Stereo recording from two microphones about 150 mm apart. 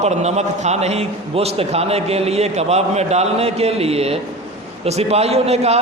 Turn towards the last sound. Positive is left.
turn(degrees=-45)  # may be behind; listen again after turning